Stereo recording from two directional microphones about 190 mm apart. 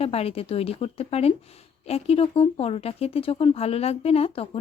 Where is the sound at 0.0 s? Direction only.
30° left (ahead or behind).